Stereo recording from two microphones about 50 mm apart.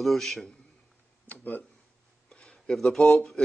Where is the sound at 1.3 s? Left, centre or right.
Left.